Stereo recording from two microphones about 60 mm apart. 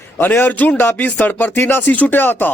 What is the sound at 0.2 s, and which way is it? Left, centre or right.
Speech, left.